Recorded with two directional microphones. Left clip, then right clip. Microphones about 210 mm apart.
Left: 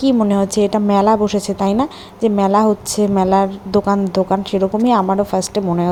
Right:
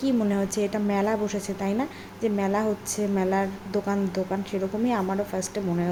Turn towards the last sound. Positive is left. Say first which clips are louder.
# left 10 dB
turn(degrees=30)  # may be behind; listen again after turning